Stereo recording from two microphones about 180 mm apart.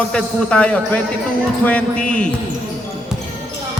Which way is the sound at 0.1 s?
5° left (ahead or behind).